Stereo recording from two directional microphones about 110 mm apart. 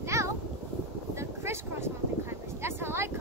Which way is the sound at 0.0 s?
25° right (ahead or behind).